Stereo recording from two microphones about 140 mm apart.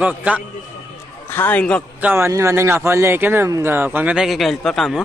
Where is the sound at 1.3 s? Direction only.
15° left (ahead or behind).